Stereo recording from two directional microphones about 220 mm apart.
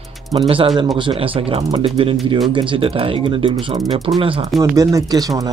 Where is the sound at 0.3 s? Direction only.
25° right (ahead or behind).